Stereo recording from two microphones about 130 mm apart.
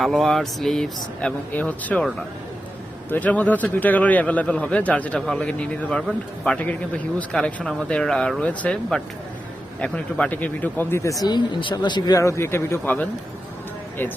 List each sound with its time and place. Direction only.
0.0 s a man's voice: centre (ahead or behind)
3.1 s a man's voice: 10° left (ahead or behind)
11.2 s speech: 35° left (ahead or behind); by 13.1 s 15° left (ahead or behind)